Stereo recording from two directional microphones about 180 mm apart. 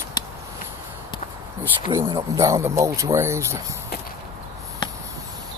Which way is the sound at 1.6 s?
15° right (ahead or behind).